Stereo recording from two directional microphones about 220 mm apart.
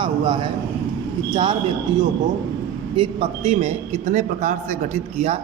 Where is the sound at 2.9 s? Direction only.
25° right (ahead or behind).